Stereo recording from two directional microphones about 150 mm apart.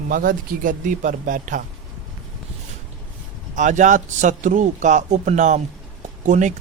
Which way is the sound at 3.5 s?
55° right (ahead or behind).